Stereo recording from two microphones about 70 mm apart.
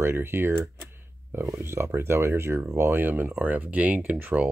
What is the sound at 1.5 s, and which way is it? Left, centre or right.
Speech, right.